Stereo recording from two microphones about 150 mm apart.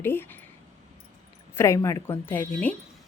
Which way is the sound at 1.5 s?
20° left (ahead or behind).